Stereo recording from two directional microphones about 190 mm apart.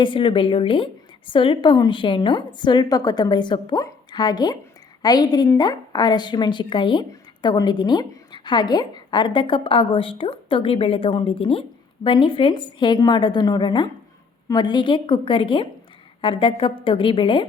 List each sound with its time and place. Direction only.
0.0 s a woman's voice: 25° left (ahead or behind)